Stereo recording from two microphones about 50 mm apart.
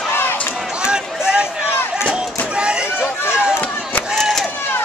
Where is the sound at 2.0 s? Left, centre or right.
Right.